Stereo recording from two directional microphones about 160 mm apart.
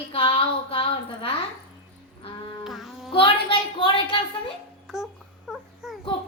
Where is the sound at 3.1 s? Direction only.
35° left (ahead or behind).